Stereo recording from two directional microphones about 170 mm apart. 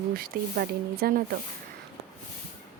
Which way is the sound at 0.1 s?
60° right (ahead or behind).